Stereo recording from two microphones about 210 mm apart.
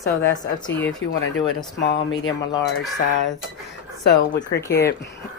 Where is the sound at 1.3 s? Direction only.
60° left (ahead or behind).